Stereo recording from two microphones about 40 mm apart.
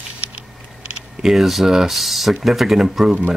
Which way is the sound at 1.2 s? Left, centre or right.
Centre.